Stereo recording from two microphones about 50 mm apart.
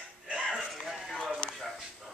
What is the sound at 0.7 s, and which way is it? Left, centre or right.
Bow-wow, centre.